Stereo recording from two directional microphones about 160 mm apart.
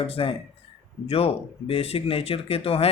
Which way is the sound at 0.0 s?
35° left (ahead or behind).